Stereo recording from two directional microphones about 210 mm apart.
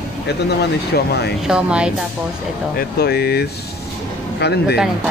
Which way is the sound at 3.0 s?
50° left (ahead or behind).